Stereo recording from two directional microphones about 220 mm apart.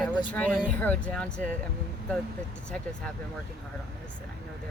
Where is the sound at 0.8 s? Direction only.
5° left (ahead or behind).